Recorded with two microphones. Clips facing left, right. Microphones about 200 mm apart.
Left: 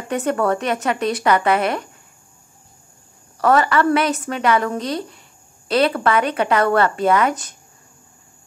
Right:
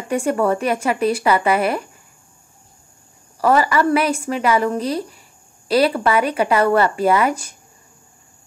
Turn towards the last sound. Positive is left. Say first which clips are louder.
# right 1 dB
turn(degrees=-10)  # may be behind; listen again after turning